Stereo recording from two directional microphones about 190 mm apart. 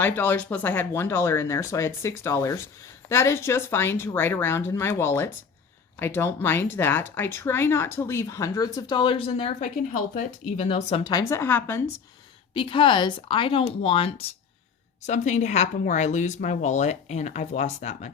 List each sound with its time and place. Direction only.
0.0 s speech: 10° left (ahead or behind); by 9.6 s 30° left (ahead or behind)
9.9 s speech: 45° left (ahead or behind)
10.7 s speech: 30° left (ahead or behind); by 11.8 s 10° left (ahead or behind)
12.5 s speech: 25° left (ahead or behind)